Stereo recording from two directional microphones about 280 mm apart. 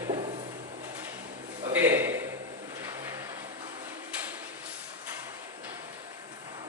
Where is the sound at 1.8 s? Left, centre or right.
Centre.